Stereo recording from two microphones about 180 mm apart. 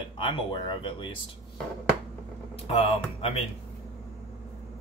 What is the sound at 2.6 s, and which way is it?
Speech, 35° left (ahead or behind).